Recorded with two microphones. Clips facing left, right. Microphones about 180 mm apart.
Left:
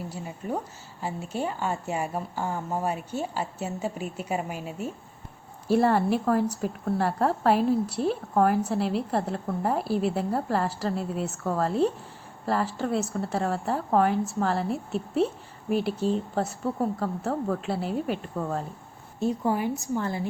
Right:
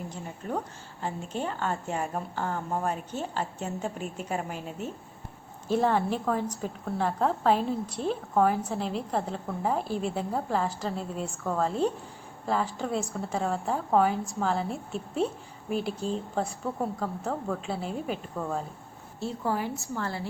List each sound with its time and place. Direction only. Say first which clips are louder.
0.1 s a woman's voice: left 1 dB; 10° left (ahead or behind)
19.2 s a woman's voice: left 5 dB; 15° left (ahead or behind)